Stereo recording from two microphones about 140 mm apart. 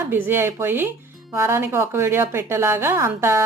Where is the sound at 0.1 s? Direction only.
15° right (ahead or behind).